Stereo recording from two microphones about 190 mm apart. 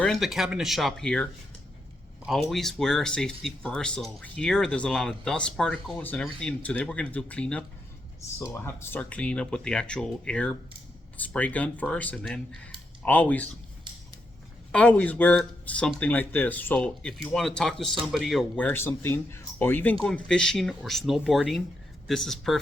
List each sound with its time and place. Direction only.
0.0 s speech: centre (ahead or behind)
8.6 s speech: 10° left (ahead or behind)
14.7 s speech: 5° left (ahead or behind)